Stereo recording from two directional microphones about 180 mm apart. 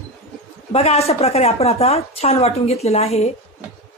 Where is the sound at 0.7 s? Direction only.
35° left (ahead or behind).